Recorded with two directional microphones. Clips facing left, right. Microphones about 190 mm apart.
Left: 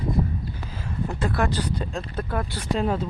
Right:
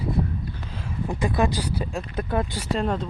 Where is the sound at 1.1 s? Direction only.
15° right (ahead or behind).